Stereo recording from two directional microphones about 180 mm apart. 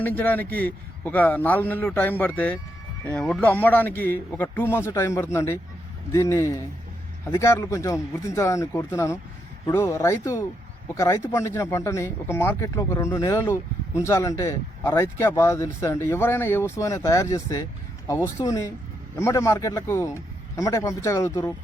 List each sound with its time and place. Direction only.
0.0 s speech: 10° left (ahead or behind)